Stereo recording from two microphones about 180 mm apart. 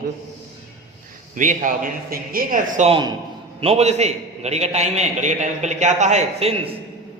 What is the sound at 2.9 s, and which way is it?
Speech, 25° right (ahead or behind).